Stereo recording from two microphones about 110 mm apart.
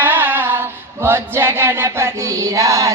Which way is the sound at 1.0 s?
20° right (ahead or behind).